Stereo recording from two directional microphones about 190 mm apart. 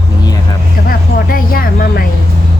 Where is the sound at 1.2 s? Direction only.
50° left (ahead or behind).